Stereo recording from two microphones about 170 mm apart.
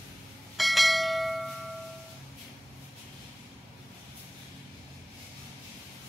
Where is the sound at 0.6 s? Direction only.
Centre (ahead or behind).